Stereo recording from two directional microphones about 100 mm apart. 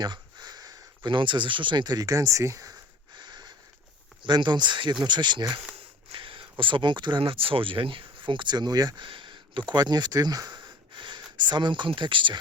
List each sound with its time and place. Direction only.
0.0 s a sound: 45° right (ahead or behind)
1.1 s speech: 50° right (ahead or behind); by 2.7 s 35° right (ahead or behind)
3.2 s sniff: 45° right (ahead or behind)
4.2 s speech: 50° right (ahead or behind)
6.1 s speech: 60° right (ahead or behind); by 9.0 s 40° right (ahead or behind)
9.0 s speech: 55° right (ahead or behind)